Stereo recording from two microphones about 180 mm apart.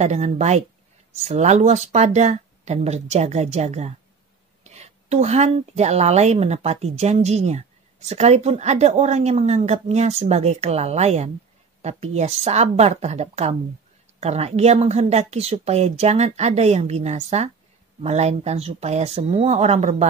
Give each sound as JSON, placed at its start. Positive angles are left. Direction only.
{"t": 0.0, "sound": "a woman's voice", "side_deg": -40}